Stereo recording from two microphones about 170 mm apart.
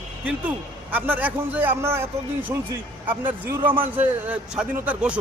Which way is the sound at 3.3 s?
10° right (ahead or behind).